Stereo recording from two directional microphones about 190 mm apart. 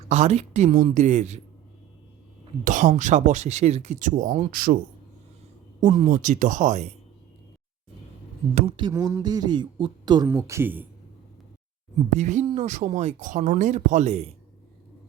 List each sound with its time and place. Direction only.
0.1 s speech: 35° right (ahead or behind)
2.6 s speech: 40° right (ahead or behind)
5.8 s speech: 40° right (ahead or behind)
8.5 s speech: 30° right (ahead or behind); by 10.8 s 10° right (ahead or behind)
12.1 s speech: 40° right (ahead or behind)